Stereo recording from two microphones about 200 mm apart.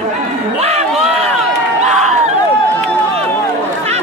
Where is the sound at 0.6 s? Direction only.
30° right (ahead or behind).